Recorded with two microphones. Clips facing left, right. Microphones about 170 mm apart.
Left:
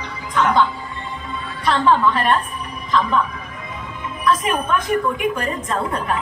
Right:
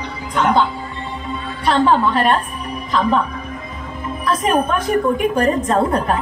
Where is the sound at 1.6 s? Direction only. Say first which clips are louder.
Right 2 dB; 35° right (ahead or behind).